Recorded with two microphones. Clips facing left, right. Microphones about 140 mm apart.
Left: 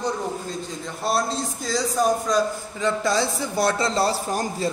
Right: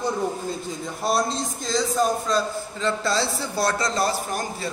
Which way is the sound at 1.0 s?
Centre (ahead or behind).